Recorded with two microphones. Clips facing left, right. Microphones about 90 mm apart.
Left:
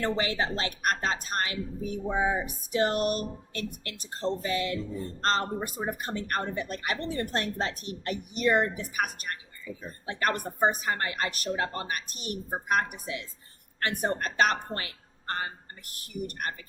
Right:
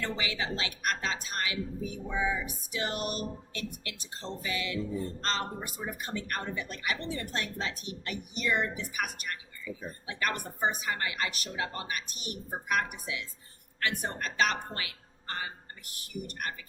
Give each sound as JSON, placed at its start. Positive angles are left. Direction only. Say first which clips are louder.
{"t": 0.0, "sound": "a woman's voice", "louder": "left 6 dB", "side_deg": 45}